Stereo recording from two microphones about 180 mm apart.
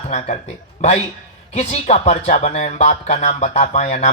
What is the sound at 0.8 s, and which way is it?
Speech, 40° left (ahead or behind).